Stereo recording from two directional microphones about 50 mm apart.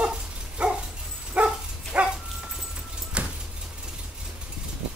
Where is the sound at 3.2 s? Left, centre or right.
Right.